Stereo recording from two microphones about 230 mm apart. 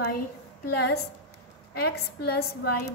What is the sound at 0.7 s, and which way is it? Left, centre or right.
A woman's voice, left.